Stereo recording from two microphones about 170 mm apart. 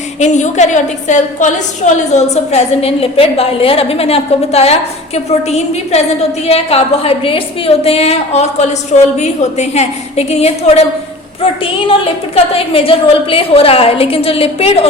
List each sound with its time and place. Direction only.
0.2 s a woman's voice: 45° left (ahead or behind)